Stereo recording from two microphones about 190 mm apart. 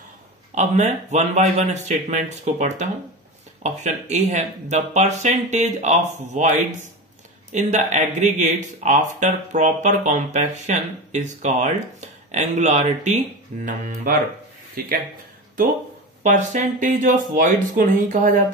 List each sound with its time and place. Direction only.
0.6 s speech: 35° right (ahead or behind)
16.2 s speech: 40° right (ahead or behind)